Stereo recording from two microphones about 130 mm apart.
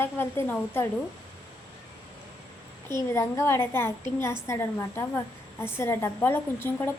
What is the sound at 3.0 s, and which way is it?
A woman's voice, 20° left (ahead or behind).